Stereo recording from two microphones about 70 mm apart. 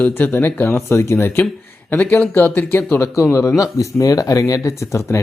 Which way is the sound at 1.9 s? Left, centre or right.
Left.